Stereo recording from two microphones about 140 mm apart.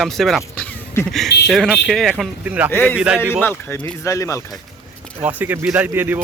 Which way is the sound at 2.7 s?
15° left (ahead or behind).